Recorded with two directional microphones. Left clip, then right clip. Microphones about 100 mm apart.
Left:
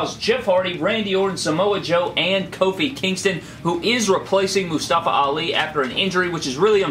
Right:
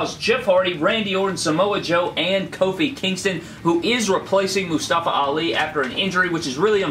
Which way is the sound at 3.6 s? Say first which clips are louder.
Right 1 dB; 15° left (ahead or behind).